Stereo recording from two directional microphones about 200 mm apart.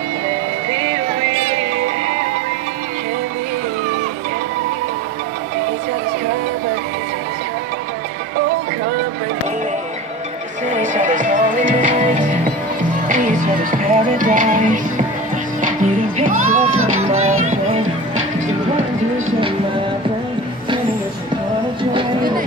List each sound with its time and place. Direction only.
0.7 s music: 25° right (ahead or behind)
10.7 s music: 40° right (ahead or behind)
13.7 s music: 40° right (ahead or behind)
17.2 s music: 90° right
17.5 s music: 35° right (ahead or behind)